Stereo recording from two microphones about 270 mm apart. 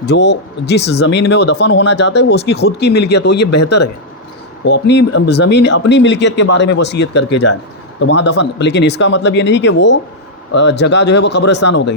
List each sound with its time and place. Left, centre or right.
0.0 s speech: left
4.6 s speech: left